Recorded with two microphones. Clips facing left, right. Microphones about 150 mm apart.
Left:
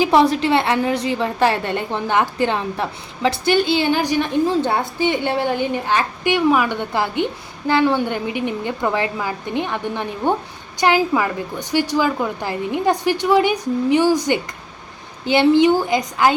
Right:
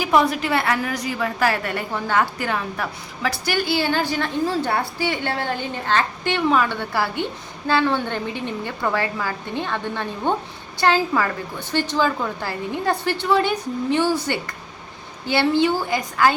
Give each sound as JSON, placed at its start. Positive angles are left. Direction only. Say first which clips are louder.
{"t": 0.0, "sound": "a woman's voice", "louder": "left 4 dB", "side_deg": 30}